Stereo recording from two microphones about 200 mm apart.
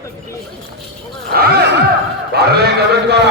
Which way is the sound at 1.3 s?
50° right (ahead or behind).